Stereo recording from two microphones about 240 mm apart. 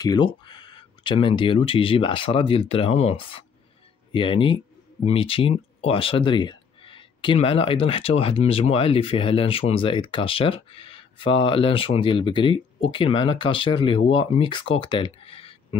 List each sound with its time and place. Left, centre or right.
0.0 s speech: centre